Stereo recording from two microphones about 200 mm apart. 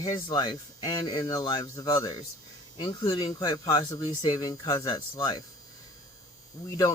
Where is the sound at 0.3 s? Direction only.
20° left (ahead or behind).